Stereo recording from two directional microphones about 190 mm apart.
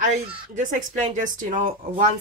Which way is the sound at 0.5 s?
40° right (ahead or behind).